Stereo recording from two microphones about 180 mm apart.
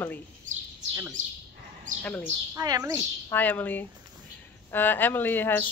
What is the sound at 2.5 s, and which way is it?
Speech, 20° right (ahead or behind).